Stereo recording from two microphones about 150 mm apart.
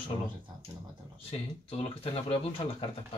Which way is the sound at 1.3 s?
40° left (ahead or behind).